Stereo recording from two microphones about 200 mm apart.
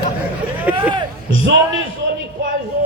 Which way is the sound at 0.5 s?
10° right (ahead or behind).